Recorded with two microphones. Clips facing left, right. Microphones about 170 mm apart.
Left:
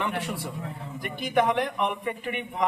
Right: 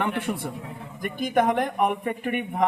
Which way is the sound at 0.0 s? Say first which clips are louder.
Right 3 dB; 55° right (ahead or behind).